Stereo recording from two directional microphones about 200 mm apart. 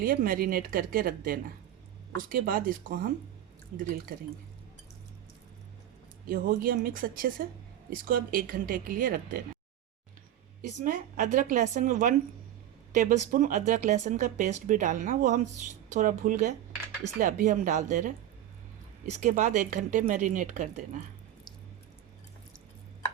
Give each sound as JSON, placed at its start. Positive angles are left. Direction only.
{"t": 0.0, "sound": "speech", "side_deg": -45}
{"t": 6.2, "sound": "speech", "side_deg": -45}
{"t": 10.6, "sound": "speech", "side_deg": -40}